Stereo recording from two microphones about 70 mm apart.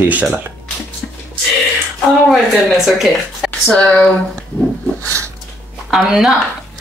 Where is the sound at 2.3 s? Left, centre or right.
Centre.